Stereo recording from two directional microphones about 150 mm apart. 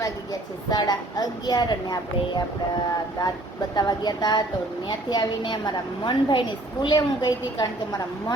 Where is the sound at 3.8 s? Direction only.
25° left (ahead or behind).